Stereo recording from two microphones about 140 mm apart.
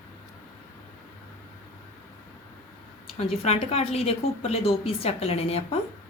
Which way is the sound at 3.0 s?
45° left (ahead or behind).